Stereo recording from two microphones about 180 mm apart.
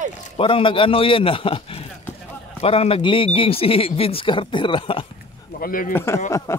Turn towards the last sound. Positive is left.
turn(degrees=15)  # may be behind; listen again after turning